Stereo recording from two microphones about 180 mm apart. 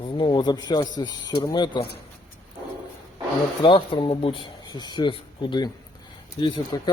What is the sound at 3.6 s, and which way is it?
Speech, 25° left (ahead or behind).